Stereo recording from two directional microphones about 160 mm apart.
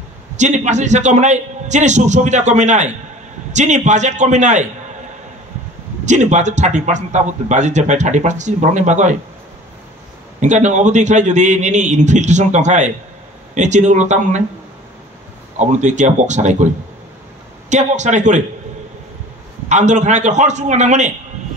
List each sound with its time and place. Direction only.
0.4 s a man's voice: 50° right (ahead or behind)
6.0 s a man's voice: 50° right (ahead or behind)
10.4 s a man's voice: 50° right (ahead or behind)
15.6 s a man's voice: 50° right (ahead or behind)
17.6 s a man's voice: 50° right (ahead or behind)
19.7 s a man's voice: 50° right (ahead or behind)